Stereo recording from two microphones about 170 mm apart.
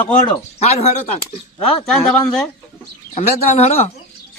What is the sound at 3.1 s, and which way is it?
Speech, 40° left (ahead or behind).